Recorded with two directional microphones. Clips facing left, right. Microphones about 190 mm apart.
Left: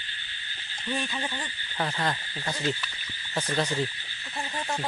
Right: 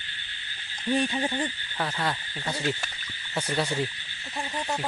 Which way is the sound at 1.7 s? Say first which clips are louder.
Left 1 dB; 10° left (ahead or behind).